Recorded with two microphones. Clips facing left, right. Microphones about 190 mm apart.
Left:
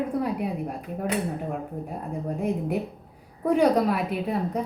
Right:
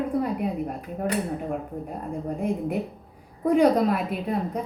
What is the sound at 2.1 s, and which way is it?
A woman's voice, 5° left (ahead or behind).